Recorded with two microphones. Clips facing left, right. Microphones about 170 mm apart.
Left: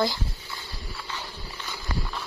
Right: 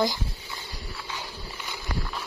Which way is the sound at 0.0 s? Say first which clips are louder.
Even; 15° right (ahead or behind).